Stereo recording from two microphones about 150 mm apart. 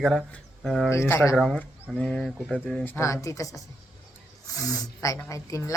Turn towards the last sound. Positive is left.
turn(degrees=20)  # may be behind; listen again after turning